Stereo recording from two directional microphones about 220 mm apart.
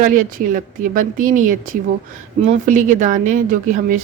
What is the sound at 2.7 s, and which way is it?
Speech, 35° right (ahead or behind).